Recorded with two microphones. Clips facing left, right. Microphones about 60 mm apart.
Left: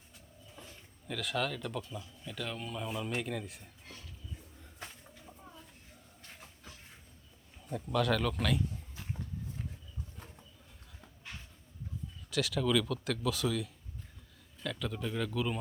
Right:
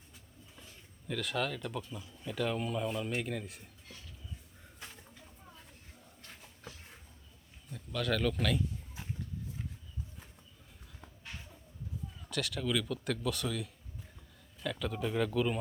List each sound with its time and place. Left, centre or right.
1.0 s speech: centre
7.9 s speech: centre
12.3 s speech: centre